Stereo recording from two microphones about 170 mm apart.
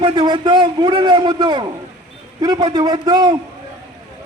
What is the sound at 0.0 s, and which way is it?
A man's voice, 25° right (ahead or behind).